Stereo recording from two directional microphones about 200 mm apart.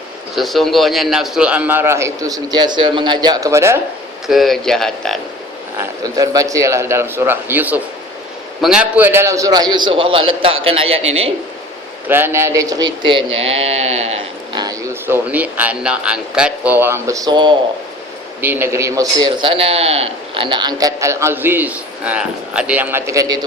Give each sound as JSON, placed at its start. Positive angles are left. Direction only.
{"t": 0.3, "sound": "a man's voice", "side_deg": 0}
{"t": 4.3, "sound": "speech", "side_deg": 0}
{"t": 5.8, "sound": "a man's voice", "side_deg": -20}
{"t": 12.0, "sound": "speech", "side_deg": -10}
{"t": 14.6, "sound": "a man's voice", "side_deg": -15}
{"t": 18.4, "sound": "a man's voice", "side_deg": -10}